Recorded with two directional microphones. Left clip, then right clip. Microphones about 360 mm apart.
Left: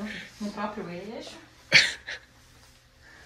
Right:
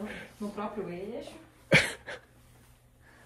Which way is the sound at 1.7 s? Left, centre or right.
Centre.